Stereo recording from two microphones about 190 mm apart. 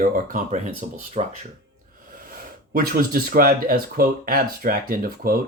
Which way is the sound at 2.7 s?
55° right (ahead or behind).